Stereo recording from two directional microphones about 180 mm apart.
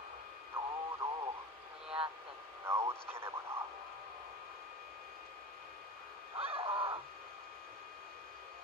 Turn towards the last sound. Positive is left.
turn(degrees=-30)  # may be behind; listen again after turning